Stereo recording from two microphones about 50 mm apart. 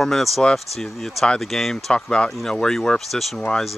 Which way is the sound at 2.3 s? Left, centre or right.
Centre.